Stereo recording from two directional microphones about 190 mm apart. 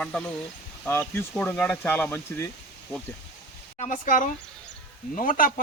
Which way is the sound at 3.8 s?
45° left (ahead or behind).